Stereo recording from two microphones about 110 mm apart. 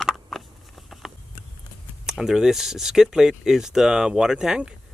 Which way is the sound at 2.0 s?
5° right (ahead or behind).